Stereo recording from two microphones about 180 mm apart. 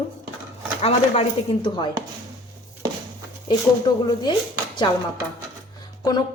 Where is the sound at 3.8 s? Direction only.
25° left (ahead or behind).